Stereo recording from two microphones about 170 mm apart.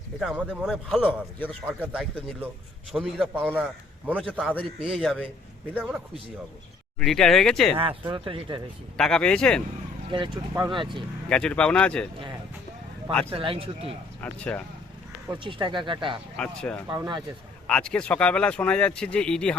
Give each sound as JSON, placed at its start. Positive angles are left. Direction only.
{"t": 0.2, "sound": "a man's voice", "side_deg": -5}
{"t": 7.0, "sound": "speech", "side_deg": 0}
{"t": 7.8, "sound": "speech", "side_deg": -30}
{"t": 9.0, "sound": "speech", "side_deg": 5}
{"t": 10.1, "sound": "speech", "side_deg": -30}
{"t": 11.3, "sound": "speech", "side_deg": 5}
{"t": 13.3, "sound": "speech", "side_deg": -30}
{"t": 14.2, "sound": "speech", "side_deg": 10}
{"t": 15.3, "sound": "speech", "side_deg": -30}
{"t": 16.4, "sound": "speech", "side_deg": 5}
{"t": 16.9, "sound": "speech", "side_deg": -25}
{"t": 17.7, "sound": "speech", "side_deg": 5}